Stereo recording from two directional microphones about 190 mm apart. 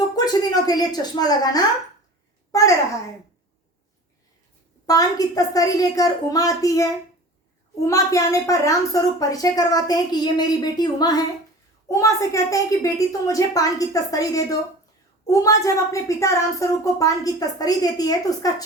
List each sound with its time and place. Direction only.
0.2 s a sound: 20° left (ahead or behind)
0.5 s a woman's voice: 20° left (ahead or behind)
4.9 s a woman's voice: 20° left (ahead or behind)